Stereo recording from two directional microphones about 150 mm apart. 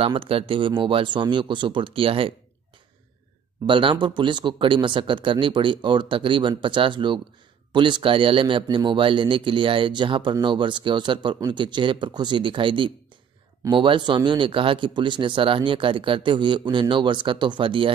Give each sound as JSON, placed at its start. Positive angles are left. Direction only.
{"t": 0.0, "sound": "speech", "side_deg": -35}
{"t": 3.6, "sound": "speech", "side_deg": -35}